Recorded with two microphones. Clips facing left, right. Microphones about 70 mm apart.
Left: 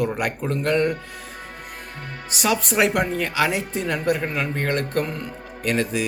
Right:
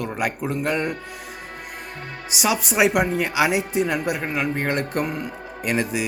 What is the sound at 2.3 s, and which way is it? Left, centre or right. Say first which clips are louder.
Speech: left 1 dB; centre.